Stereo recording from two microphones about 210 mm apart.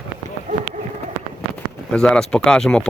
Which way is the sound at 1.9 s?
5° left (ahead or behind).